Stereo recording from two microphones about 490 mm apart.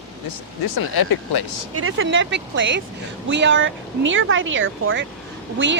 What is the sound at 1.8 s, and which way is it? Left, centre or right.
Speech, right.